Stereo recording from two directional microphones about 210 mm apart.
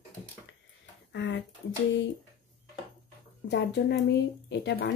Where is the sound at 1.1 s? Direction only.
55° left (ahead or behind).